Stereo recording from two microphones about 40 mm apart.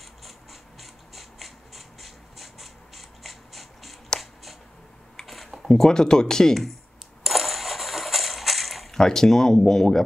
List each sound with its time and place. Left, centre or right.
0.2 s ratchet: centre
4.1 s a sound: centre
5.2 s a sound: centre
5.7 s speech: centre
7.2 s coin: centre
8.9 s speech: centre